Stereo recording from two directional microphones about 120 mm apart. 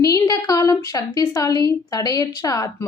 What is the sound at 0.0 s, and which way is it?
A woman's voice, 30° left (ahead or behind).